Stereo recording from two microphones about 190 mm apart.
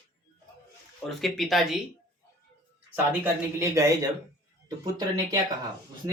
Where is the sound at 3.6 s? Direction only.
15° right (ahead or behind).